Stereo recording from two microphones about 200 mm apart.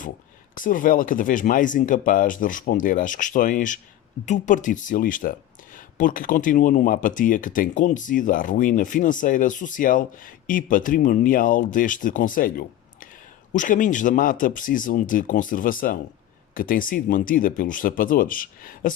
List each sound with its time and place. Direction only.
0.5 s speech: 40° left (ahead or behind)